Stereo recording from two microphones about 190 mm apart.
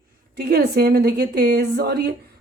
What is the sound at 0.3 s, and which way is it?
A woman's voice, 55° right (ahead or behind).